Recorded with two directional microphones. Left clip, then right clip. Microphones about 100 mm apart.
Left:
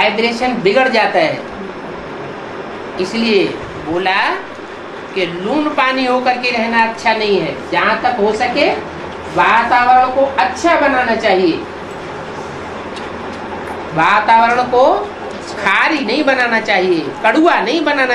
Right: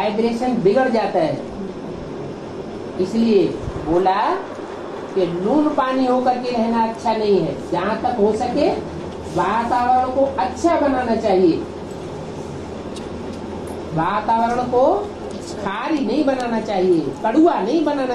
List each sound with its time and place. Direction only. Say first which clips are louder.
0.0 s a woman's voice: left 6 dB; 40° left (ahead or behind)
3.0 s a woman's voice: left 3 dB; 35° left (ahead or behind)
4.0 s speech: left 4 dB; 5° right (ahead or behind)
5.5 s a woman's voice: left 5 dB; 40° left (ahead or behind)
13.9 s a woman's voice: left 9 dB; 45° left (ahead or behind)